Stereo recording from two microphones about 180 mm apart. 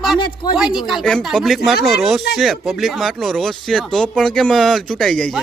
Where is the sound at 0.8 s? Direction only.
Centre (ahead or behind).